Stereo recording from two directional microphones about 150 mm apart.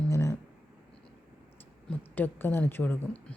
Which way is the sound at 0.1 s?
20° left (ahead or behind).